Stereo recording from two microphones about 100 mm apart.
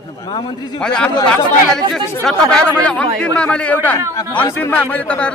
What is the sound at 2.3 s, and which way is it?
A man's voice, 10° left (ahead or behind).